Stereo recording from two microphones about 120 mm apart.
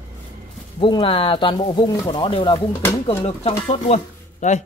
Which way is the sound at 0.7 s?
40° left (ahead or behind).